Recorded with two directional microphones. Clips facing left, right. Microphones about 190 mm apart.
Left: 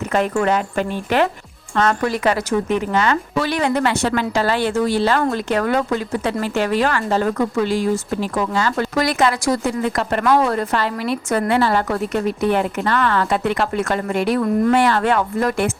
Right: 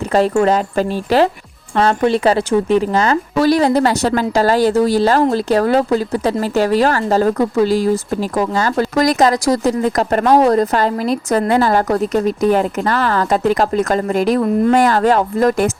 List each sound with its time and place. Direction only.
0.1 s speech: 35° right (ahead or behind)